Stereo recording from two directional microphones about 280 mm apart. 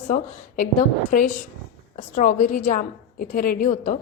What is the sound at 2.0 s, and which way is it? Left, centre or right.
A woman's voice, left.